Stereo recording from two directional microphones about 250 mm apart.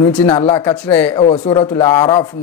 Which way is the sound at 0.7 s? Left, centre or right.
Centre.